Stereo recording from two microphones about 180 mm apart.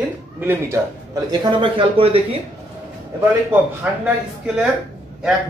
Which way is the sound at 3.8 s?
5° right (ahead or behind).